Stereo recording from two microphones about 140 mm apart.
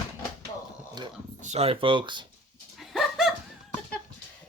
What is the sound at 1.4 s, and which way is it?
Speech, 50° right (ahead or behind).